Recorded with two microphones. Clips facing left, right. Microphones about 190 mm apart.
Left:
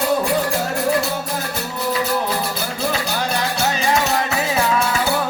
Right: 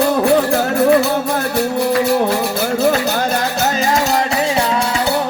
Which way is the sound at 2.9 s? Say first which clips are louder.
Right 5 dB; 45° right (ahead or behind).